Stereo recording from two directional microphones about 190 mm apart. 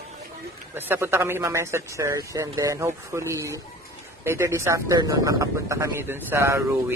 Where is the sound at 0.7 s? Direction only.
10° right (ahead or behind).